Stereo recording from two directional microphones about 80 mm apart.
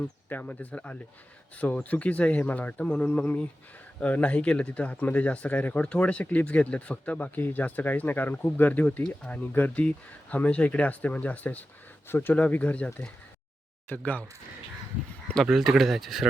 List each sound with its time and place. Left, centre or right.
0.3 s speech: left
13.9 s speech: centre
15.4 s speech: centre